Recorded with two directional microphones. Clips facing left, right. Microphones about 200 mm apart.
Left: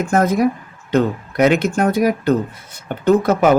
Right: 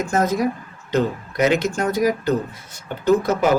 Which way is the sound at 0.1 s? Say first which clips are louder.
Left 5 dB; 55° left (ahead or behind).